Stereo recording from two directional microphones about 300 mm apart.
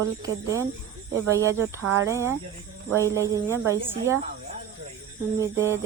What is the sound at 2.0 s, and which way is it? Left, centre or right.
A woman's voice, centre.